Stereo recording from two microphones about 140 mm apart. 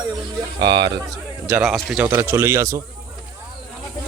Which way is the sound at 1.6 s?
5° right (ahead or behind).